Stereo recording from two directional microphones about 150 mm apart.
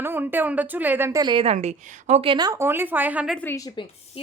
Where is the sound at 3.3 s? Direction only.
10° left (ahead or behind).